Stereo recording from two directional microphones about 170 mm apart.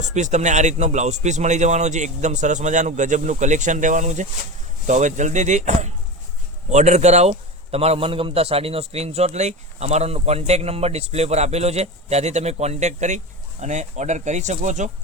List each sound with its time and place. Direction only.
0.0 s a man's voice: 45° right (ahead or behind)